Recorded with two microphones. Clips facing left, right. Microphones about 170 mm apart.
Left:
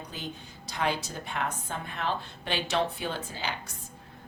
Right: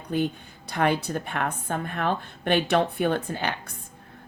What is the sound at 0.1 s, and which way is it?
A woman's voice, 55° right (ahead or behind).